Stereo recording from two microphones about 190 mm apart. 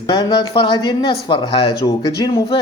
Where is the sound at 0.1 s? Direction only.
25° left (ahead or behind).